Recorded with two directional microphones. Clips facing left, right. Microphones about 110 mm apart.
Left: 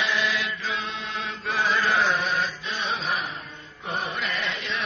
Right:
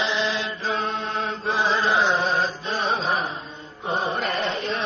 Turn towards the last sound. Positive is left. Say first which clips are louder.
# right 5 dB
turn(degrees=-35)  # may be behind; listen again after turning